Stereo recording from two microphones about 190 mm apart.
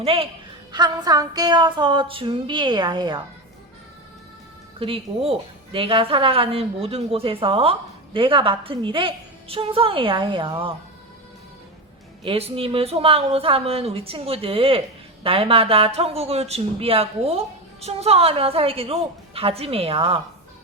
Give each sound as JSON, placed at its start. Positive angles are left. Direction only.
{"t": 0.0, "sound": "a woman's voice", "side_deg": -30}
{"t": 4.8, "sound": "a woman's voice", "side_deg": -30}
{"t": 12.2, "sound": "speech", "side_deg": -30}